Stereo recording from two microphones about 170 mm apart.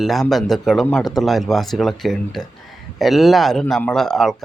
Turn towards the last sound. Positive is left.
turn(degrees=0)  # may be behind; listen again after turning